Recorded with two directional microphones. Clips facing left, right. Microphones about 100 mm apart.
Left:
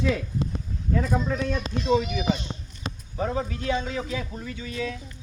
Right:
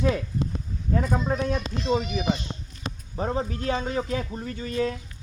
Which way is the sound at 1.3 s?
35° right (ahead or behind).